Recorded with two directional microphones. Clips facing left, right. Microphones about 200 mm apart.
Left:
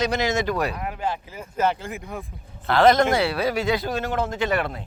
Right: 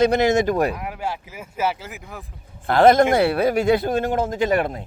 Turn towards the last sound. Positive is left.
turn(degrees=-45)  # may be behind; listen again after turning